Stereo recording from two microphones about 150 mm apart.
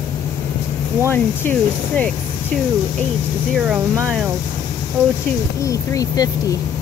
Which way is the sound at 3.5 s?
5° right (ahead or behind).